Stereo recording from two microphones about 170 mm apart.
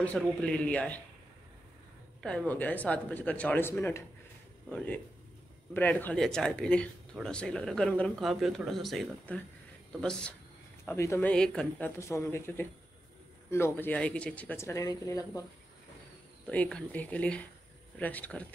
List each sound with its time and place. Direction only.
0.0 s speech: 5° left (ahead or behind)
2.2 s speech: 5° left (ahead or behind)
12.0 s speech: 15° left (ahead or behind)
16.4 s speech: 5° left (ahead or behind)